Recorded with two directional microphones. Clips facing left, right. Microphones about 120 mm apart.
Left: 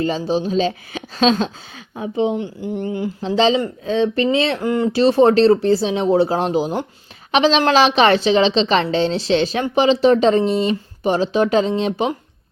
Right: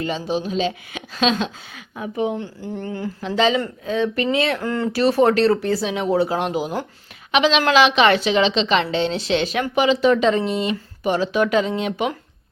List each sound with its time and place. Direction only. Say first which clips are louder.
0.0 s a woman's voice: left 4 dB; 35° left (ahead or behind); by 3.1 s 20° left (ahead or behind)
3.2 s a woman's voice: left 3 dB; 30° left (ahead or behind)